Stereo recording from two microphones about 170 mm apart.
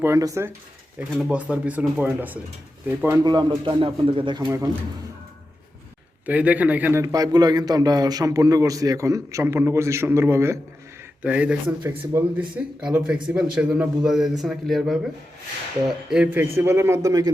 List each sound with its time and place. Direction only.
0.0 s a man's voice: 20° right (ahead or behind)
1.1 s a man's voice: 5° right (ahead or behind); by 4.4 s 30° right (ahead or behind)
4.4 s a man's voice: 15° right (ahead or behind)
6.2 s a man's voice: 10° right (ahead or behind)
7.0 s a man's voice: 20° right (ahead or behind)